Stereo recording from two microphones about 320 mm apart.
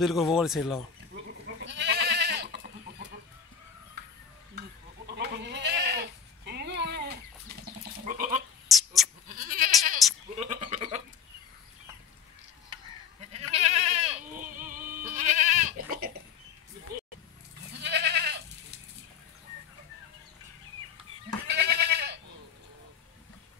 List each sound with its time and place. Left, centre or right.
0.0 s speech: centre
1.6 s goat: right
4.6 s goat: right
8.6 s a sound: centre
9.3 s goat: right
13.3 s goat: centre
17.7 s goat: right
21.5 s goat: right